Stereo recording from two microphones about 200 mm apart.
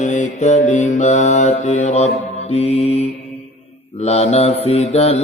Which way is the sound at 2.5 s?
30° left (ahead or behind).